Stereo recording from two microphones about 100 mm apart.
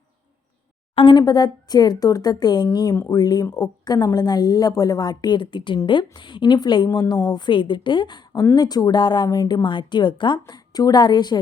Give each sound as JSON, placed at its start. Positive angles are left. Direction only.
{"t": 1.1, "sound": "a woman's voice", "side_deg": 45}
{"t": 8.3, "sound": "a woman's voice", "side_deg": 35}
{"t": 9.6, "sound": "a woman's voice", "side_deg": 50}